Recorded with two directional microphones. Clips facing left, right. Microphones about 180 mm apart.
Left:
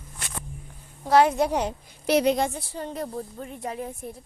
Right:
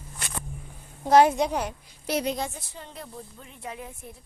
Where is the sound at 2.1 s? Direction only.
75° left (ahead or behind).